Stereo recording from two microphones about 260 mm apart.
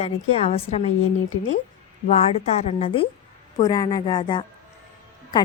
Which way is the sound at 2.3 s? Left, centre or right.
Left.